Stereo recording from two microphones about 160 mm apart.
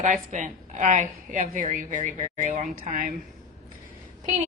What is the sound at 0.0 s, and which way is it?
A woman's voice, 50° right (ahead or behind).